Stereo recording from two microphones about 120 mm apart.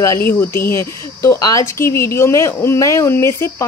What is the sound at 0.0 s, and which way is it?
Speech, 20° left (ahead or behind).